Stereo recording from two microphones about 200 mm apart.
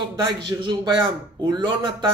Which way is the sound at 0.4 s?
25° right (ahead or behind).